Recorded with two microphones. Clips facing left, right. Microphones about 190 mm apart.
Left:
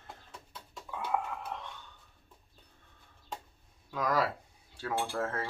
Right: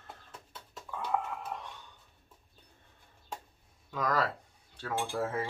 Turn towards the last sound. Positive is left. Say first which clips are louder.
# right 1 dB
turn(degrees=-10)  # may be behind; listen again after turning